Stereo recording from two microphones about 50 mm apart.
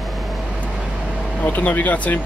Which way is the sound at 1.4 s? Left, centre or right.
Left.